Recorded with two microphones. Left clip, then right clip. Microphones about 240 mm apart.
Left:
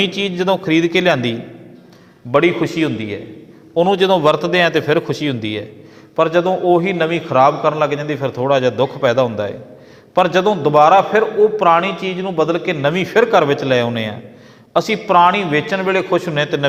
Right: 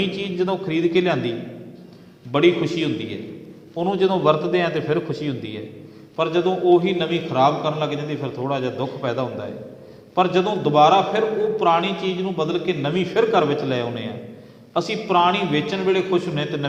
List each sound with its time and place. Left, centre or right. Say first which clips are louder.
0.0 s a man's voice: left 6 dB; left